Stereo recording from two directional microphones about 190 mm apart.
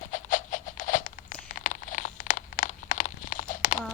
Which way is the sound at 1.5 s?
40° left (ahead or behind).